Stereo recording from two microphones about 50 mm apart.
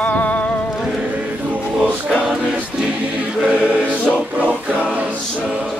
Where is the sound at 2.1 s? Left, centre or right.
Centre.